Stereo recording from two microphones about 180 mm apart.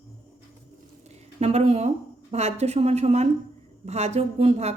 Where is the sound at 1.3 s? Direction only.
35° right (ahead or behind).